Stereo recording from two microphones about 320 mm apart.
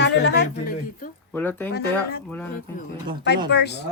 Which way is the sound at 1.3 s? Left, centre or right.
Centre.